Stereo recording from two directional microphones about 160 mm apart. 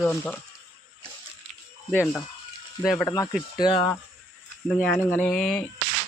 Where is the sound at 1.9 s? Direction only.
15° left (ahead or behind).